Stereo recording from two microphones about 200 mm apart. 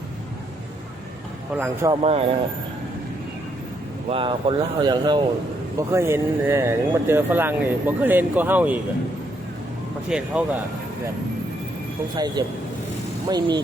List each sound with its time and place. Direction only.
1.5 s speech: 10° right (ahead or behind)
1.9 s speech: 30° right (ahead or behind)
4.1 s speech: 25° right (ahead or behind); by 8.8 s 10° right (ahead or behind)
10.1 s speech: 5° right (ahead or behind)
12.1 s speech: 20° right (ahead or behind)